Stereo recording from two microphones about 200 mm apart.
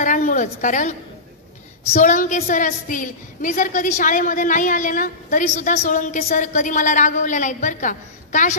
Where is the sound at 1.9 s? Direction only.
40° left (ahead or behind).